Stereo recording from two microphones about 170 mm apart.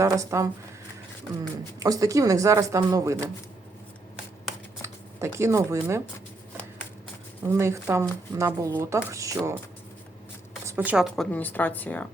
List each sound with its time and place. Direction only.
0.0 s speech: 20° right (ahead or behind)
1.8 s speech: 20° right (ahead or behind)
4.8 s speech: 15° right (ahead or behind)
7.4 s speech: 15° right (ahead or behind)
10.7 s speech: 10° right (ahead or behind)
11.3 s speech: 10° left (ahead or behind)